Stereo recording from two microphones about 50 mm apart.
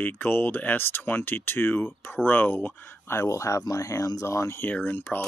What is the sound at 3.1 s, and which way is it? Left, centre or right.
Speech, left.